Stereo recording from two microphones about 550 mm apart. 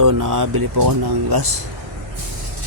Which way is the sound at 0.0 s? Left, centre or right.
Right.